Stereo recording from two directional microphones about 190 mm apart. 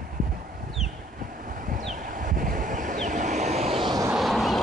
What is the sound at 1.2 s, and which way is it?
Wind, 45° right (ahead or behind).